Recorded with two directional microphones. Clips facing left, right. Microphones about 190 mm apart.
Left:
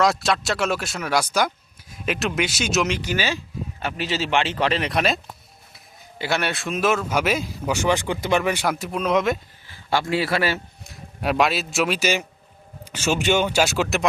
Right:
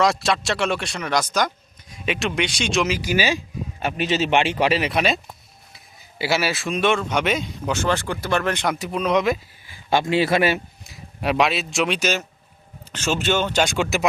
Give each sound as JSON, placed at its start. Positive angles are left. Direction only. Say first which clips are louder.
{"t": 0.0, "sound": "speech", "louder": "even", "side_deg": 0}
{"t": 9.6, "sound": "a man's voice", "louder": "right 2 dB", "side_deg": -15}
{"t": 10.8, "sound": "a man's voice", "louder": "even", "side_deg": 0}